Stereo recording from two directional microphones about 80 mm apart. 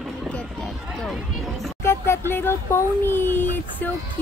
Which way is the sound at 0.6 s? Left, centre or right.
Centre.